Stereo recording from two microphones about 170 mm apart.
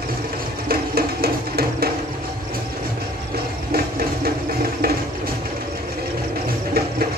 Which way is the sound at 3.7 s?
65° right (ahead or behind).